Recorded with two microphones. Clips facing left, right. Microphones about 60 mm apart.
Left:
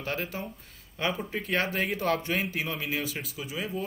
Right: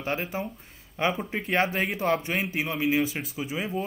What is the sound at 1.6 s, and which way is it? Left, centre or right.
Speech, centre.